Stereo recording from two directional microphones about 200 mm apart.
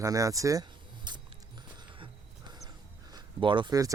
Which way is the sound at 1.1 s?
20° right (ahead or behind).